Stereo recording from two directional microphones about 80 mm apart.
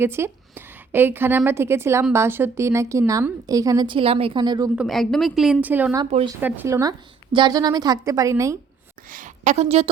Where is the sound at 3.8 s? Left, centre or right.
Right.